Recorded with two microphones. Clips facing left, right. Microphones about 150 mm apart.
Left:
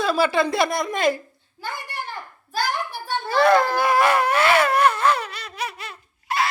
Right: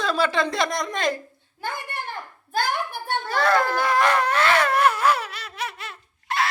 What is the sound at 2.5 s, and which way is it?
Speech, 55° right (ahead or behind).